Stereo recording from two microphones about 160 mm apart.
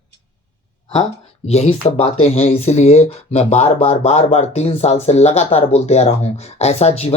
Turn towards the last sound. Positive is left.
turn(degrees=40)  # may be behind; listen again after turning